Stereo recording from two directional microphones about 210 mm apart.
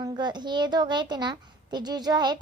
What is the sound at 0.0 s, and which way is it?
A woman's voice, 20° right (ahead or behind).